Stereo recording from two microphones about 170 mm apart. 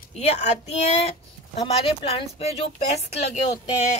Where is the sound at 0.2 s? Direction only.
40° left (ahead or behind).